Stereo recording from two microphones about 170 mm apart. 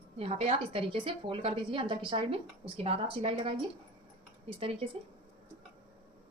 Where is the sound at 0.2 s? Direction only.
35° right (ahead or behind).